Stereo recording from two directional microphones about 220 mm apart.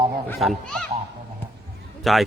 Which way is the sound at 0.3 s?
Centre (ahead or behind).